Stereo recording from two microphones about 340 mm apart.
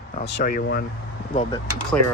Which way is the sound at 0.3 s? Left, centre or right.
Left.